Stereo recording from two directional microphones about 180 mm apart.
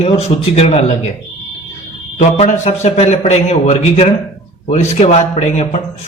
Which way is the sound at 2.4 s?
35° left (ahead or behind).